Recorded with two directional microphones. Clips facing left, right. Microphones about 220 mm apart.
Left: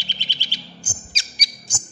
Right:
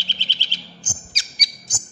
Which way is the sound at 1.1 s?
30° left (ahead or behind).